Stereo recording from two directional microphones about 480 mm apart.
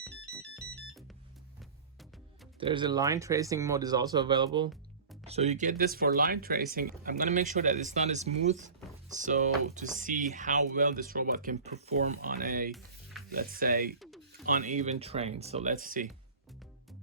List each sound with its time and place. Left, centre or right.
0.0 s music: centre
2.6 s speech: centre
14.0 s a sound: centre
14.4 s speech: centre